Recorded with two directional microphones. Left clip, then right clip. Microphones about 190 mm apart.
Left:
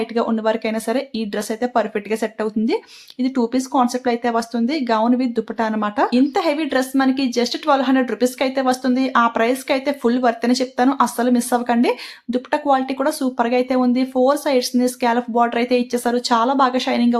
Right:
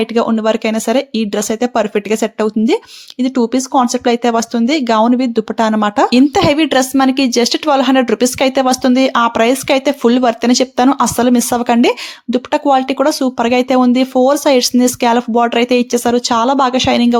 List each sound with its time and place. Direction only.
0.0 s speech: 35° right (ahead or behind)
6.1 s speech: 45° right (ahead or behind)